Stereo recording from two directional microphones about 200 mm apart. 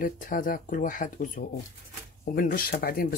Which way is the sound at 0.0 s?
45° left (ahead or behind).